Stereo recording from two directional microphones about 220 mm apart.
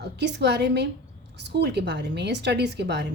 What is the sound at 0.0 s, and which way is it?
A woman's voice, 50° right (ahead or behind).